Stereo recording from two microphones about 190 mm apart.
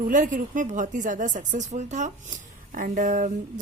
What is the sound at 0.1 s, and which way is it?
A woman's voice, 45° right (ahead or behind).